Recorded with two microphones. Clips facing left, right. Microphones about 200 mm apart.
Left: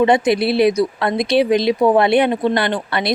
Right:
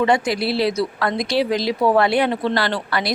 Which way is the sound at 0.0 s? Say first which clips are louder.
Left 4 dB; 20° left (ahead or behind).